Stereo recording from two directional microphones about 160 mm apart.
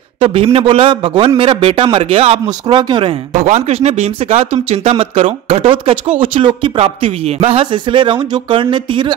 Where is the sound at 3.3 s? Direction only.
45° right (ahead or behind).